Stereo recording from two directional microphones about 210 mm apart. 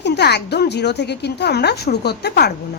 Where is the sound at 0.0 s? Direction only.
55° left (ahead or behind).